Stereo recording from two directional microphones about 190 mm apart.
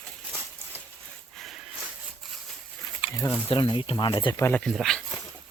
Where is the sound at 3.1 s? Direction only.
15° left (ahead or behind).